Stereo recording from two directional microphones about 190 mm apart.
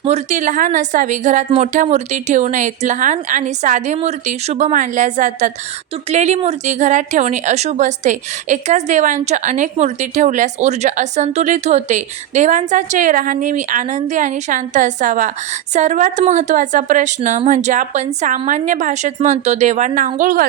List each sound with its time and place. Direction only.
0.0 s a woman's voice: 35° right (ahead or behind)